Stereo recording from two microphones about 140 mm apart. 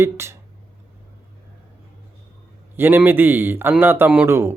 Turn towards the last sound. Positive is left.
turn(degrees=-20)  # may be behind; listen again after turning